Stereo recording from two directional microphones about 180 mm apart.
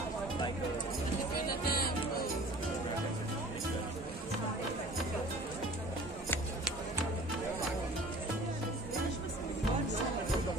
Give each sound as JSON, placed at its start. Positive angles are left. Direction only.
{"t": 1.5, "sound": "music", "side_deg": 55}